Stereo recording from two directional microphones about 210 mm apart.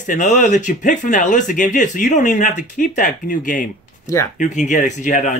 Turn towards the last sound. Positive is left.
turn(degrees=35)  # may be behind; listen again after turning